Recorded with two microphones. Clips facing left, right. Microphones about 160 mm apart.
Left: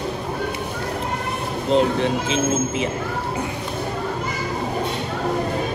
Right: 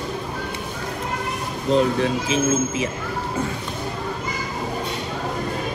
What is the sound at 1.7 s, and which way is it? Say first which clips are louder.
Speech: even; 30° left (ahead or behind).